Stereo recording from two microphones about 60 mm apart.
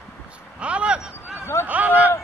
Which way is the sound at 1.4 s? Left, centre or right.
Left.